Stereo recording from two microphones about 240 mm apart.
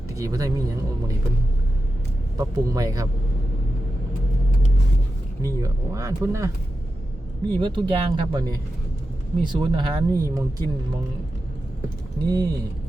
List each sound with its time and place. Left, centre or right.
0.1 s speech: centre
2.4 s speech: centre
5.4 s speech: centre
7.6 s speech: centre
12.2 s speech: centre